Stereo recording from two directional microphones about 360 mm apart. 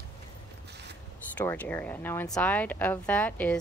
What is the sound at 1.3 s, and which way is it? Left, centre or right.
Speech, centre.